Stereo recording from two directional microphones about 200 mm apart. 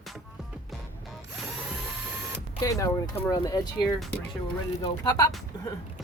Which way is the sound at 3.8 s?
Centre (ahead or behind).